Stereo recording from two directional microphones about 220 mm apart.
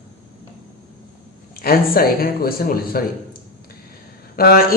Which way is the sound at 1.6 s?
40° left (ahead or behind).